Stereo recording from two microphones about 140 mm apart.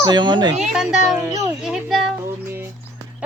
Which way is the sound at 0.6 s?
5° right (ahead or behind).